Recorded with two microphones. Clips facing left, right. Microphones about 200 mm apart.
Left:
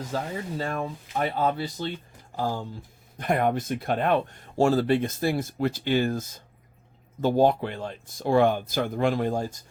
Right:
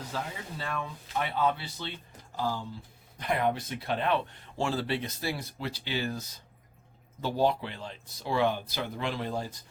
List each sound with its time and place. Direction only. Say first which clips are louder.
0.1 s speech: left 8 dB; 45° left (ahead or behind)